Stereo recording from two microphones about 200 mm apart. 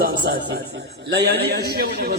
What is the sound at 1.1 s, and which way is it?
Speech, 55° right (ahead or behind).